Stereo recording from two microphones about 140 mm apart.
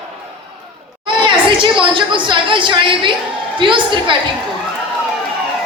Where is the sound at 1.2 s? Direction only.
35° right (ahead or behind).